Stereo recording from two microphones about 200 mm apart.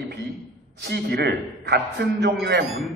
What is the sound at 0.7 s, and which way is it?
A man's voice, 55° right (ahead or behind).